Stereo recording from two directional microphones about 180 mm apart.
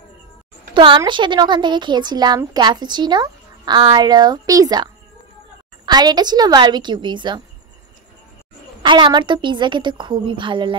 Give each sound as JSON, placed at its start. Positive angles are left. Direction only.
{"t": 0.7, "sound": "speech", "side_deg": -25}
{"t": 5.9, "sound": "speech", "side_deg": -25}
{"t": 8.8, "sound": "speech", "side_deg": -25}